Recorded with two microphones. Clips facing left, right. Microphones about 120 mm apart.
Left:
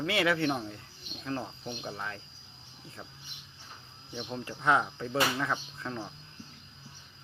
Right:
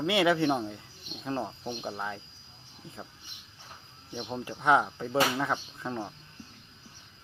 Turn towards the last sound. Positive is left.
turn(degrees=-15)  # may be behind; listen again after turning